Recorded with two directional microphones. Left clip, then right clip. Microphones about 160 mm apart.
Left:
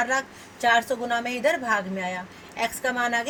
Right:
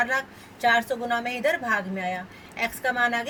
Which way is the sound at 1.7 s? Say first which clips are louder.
Even; 45° left (ahead or behind).